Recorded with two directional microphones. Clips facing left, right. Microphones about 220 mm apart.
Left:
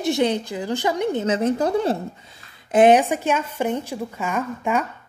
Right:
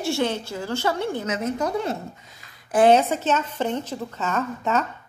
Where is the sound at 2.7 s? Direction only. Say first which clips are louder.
Left 2 dB; 15° left (ahead or behind).